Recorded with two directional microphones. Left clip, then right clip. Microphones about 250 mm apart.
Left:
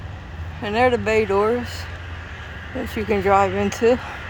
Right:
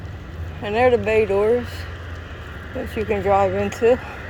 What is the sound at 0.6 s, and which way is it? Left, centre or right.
Speech, left.